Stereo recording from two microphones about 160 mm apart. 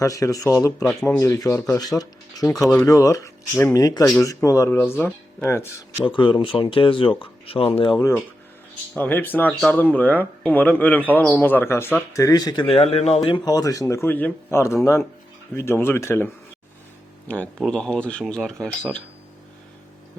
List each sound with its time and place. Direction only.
0.0 s speech: 20° left (ahead or behind)
2.6 s speech: centre (ahead or behind)
2.8 s speech: 20° left (ahead or behind)
6.1 s speech: 30° left (ahead or behind)
9.0 s speech: 10° left (ahead or behind)
12.6 s speech: 35° left (ahead or behind); by 18.5 s 5° left (ahead or behind)